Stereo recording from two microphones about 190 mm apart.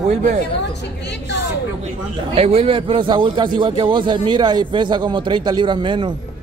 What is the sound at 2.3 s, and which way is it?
A man's voice, 30° right (ahead or behind).